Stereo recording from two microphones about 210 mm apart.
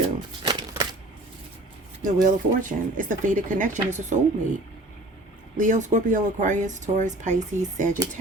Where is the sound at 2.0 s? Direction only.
40° right (ahead or behind).